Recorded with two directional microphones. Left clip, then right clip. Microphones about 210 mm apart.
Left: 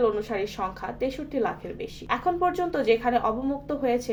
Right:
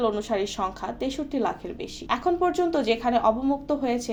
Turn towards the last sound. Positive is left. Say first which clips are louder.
# even
turn(degrees=-30)  # may be behind; listen again after turning